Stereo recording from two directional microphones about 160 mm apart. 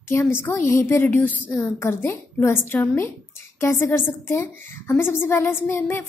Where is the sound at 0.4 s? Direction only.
15° left (ahead or behind).